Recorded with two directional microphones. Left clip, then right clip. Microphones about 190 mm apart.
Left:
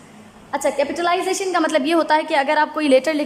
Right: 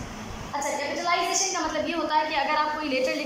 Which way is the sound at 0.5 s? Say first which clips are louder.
Left 9 dB; 60° left (ahead or behind).